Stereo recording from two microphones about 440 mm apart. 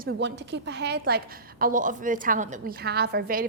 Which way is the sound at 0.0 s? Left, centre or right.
Right.